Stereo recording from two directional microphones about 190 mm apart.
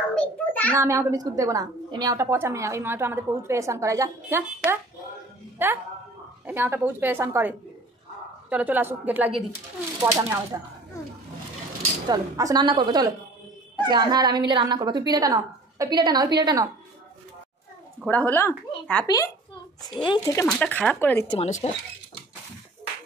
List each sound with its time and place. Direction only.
0.1 s a sound: 10° left (ahead or behind)
0.7 s a woman's voice: 15° right (ahead or behind)
12.1 s a woman's voice: 20° right (ahead or behind)
18.0 s a child's voice: 10° left (ahead or behind)
20.4 s speech: 5° left (ahead or behind)
21.3 s speech: 35° left (ahead or behind)